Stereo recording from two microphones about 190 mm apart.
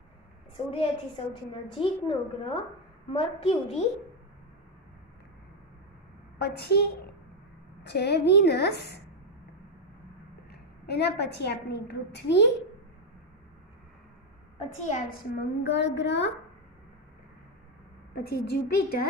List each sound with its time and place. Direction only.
0.7 s a woman's voice: 30° left (ahead or behind)
6.3 s a woman's voice: 60° left (ahead or behind)
10.5 s a woman's voice: 60° left (ahead or behind)
14.7 s a woman's voice: 40° left (ahead or behind)
15.3 s a woman's voice: 60° left (ahead or behind)
18.1 s a woman's voice: 55° left (ahead or behind)